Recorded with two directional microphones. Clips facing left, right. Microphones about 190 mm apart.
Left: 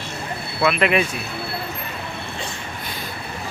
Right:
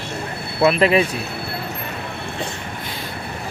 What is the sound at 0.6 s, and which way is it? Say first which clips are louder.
Speech: right 4 dB; 35° right (ahead or behind).